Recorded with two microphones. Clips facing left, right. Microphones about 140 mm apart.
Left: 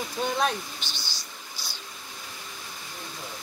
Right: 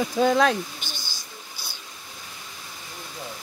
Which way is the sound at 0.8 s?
50° right (ahead or behind).